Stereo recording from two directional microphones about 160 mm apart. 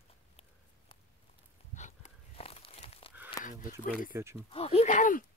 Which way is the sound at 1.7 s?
45° left (ahead or behind).